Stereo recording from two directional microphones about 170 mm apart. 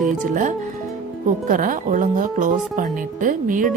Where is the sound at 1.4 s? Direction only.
50° right (ahead or behind).